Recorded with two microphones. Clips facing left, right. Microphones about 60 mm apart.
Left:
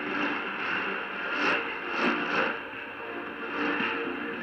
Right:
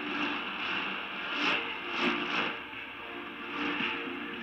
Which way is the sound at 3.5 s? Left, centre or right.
Left.